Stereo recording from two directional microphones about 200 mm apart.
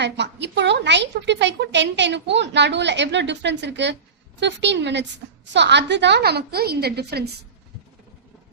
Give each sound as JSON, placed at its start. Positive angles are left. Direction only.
{"t": 0.0, "sound": "a woman's voice", "side_deg": -60}